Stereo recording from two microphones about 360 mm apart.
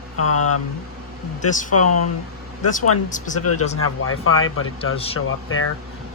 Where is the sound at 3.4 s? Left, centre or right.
Left.